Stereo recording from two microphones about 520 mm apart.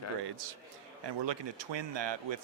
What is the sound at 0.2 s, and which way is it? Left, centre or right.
Speech, right.